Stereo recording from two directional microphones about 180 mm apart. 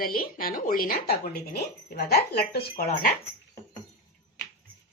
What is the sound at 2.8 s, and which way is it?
Speech, 50° left (ahead or behind).